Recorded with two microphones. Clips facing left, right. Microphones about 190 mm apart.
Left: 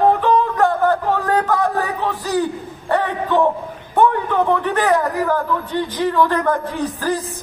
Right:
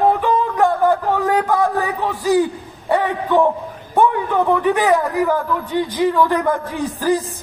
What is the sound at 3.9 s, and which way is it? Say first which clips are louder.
A man's voice: even; 15° right (ahead or behind).